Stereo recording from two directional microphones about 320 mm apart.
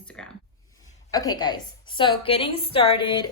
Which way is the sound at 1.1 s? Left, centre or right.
Centre.